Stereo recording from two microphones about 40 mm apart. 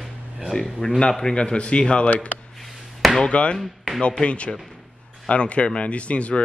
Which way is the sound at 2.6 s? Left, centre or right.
Centre.